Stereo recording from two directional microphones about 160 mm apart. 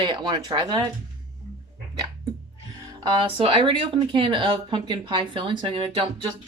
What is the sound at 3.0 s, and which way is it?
Speech, 30° right (ahead or behind).